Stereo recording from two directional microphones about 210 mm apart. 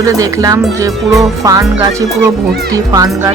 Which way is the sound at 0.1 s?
15° right (ahead or behind).